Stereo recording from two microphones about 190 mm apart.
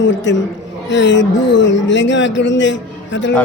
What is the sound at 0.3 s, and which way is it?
A man's voice, 70° left (ahead or behind).